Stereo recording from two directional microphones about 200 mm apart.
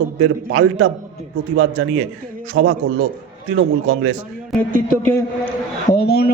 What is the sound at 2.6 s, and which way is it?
A man's voice, 90° right.